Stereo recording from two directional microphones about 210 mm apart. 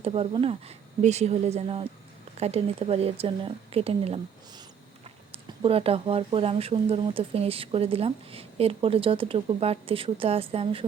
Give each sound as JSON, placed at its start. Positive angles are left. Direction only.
{"t": 0.0, "sound": "speech", "side_deg": -25}